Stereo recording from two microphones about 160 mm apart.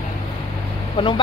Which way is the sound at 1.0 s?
30° left (ahead or behind).